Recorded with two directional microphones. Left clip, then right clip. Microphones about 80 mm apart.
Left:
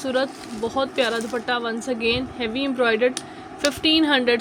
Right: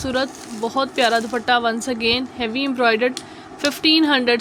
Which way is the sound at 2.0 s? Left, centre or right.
Right.